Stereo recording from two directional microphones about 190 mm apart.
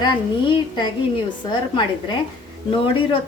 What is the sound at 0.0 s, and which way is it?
A woman's voice, 25° left (ahead or behind).